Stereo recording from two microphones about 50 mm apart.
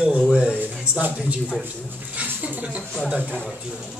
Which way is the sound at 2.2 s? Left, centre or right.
Right.